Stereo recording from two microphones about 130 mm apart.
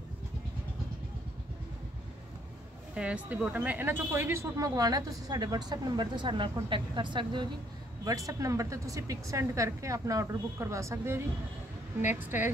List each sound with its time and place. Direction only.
2.9 s speech: 10° right (ahead or behind); by 7.4 s 35° right (ahead or behind)
8.0 s speech: 25° right (ahead or behind)